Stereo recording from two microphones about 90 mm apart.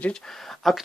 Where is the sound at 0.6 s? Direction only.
Centre (ahead or behind).